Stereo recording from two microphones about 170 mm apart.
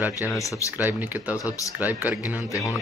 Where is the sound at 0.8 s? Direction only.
10° right (ahead or behind).